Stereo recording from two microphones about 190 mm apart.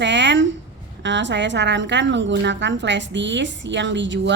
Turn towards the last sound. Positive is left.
turn(degrees=-70)  # may be behind; listen again after turning